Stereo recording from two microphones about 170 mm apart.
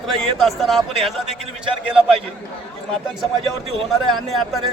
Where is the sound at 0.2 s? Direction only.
Centre (ahead or behind).